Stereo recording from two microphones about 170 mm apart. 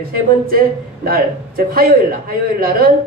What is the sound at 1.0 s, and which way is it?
A man's voice, 60° right (ahead or behind).